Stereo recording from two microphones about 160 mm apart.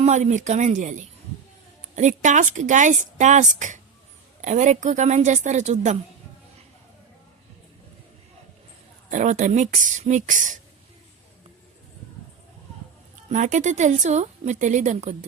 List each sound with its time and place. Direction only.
0.0 s a woman's voice: 45° right (ahead or behind)
9.0 s a woman's voice: 50° right (ahead or behind)
13.2 s a woman's voice: 50° right (ahead or behind)